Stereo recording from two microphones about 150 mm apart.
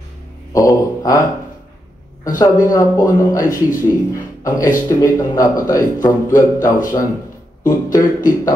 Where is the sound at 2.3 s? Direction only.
20° left (ahead or behind).